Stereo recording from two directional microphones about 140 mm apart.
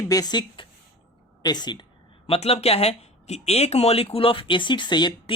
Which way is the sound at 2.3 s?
45° left (ahead or behind).